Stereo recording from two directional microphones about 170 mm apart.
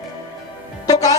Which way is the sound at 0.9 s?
20° left (ahead or behind).